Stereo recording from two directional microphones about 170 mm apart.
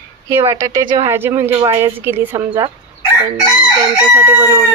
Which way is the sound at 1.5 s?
30° right (ahead or behind).